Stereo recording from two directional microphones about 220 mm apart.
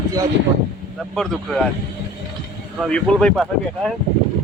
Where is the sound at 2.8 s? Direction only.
5° left (ahead or behind).